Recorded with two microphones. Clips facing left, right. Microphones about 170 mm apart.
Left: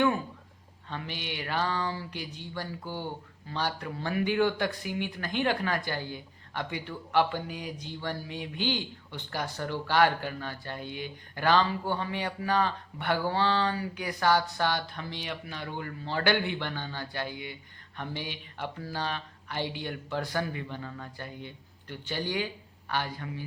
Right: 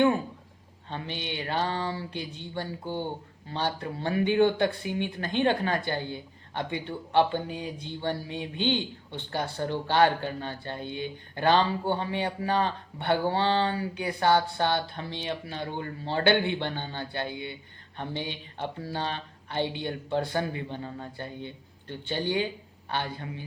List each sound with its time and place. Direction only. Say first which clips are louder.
0.9 s speech: right 2 dB; 25° right (ahead or behind)